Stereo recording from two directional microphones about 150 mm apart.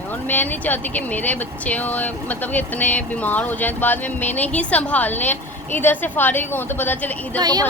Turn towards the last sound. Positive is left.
turn(degrees=-25)  # may be behind; listen again after turning